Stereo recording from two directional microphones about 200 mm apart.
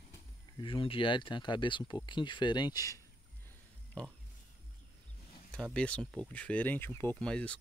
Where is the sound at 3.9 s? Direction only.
5° left (ahead or behind).